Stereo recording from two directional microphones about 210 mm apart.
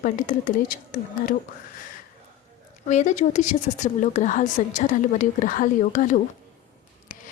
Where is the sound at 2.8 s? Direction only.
35° left (ahead or behind).